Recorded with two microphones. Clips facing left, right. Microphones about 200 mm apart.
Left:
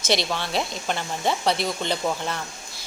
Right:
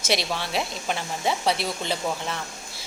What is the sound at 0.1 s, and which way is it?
A woman's voice, 5° right (ahead or behind).